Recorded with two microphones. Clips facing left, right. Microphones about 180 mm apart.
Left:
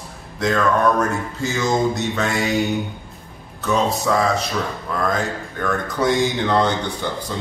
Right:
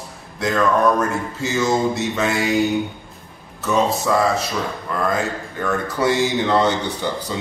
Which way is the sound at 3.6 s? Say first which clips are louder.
Right 1 dB; 5° right (ahead or behind).